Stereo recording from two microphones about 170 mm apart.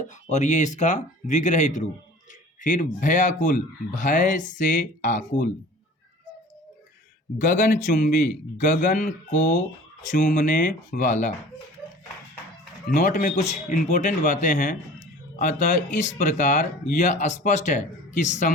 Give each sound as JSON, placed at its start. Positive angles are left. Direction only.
{"t": 0.1, "sound": "a man's voice", "side_deg": 45}
{"t": 7.3, "sound": "a man's voice", "side_deg": 50}
{"t": 12.9, "sound": "a man's voice", "side_deg": 50}